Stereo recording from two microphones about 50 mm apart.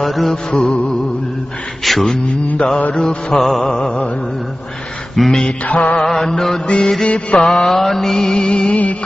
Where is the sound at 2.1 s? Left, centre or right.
Left.